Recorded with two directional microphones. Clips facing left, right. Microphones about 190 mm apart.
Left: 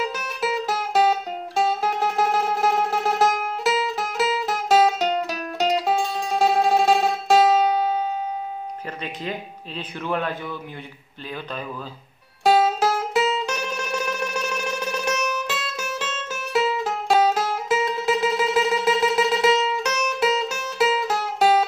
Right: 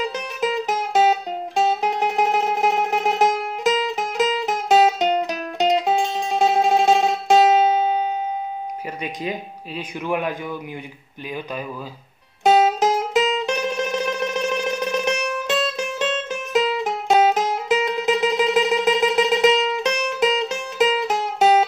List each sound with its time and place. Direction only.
0.0 s music: 15° right (ahead or behind)
9.0 s speech: 15° right (ahead or behind)
12.4 s music: 20° right (ahead or behind)
15.6 s music: 20° right (ahead or behind)